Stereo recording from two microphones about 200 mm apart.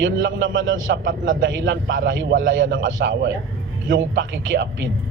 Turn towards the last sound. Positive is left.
turn(degrees=-70)  # may be behind; listen again after turning